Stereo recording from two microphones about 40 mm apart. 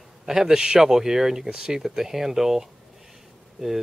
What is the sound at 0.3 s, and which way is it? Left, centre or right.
Speech, centre.